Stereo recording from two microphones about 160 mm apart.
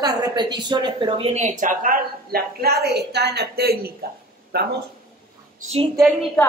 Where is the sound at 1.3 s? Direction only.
50° right (ahead or behind); by 4.7 s 80° right.